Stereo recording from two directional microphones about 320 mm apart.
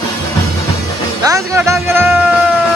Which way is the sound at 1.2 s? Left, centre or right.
Centre.